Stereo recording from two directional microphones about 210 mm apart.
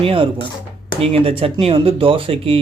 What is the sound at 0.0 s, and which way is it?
Speech, 25° right (ahead or behind).